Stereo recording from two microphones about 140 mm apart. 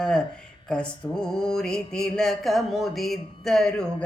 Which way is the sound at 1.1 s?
5° left (ahead or behind).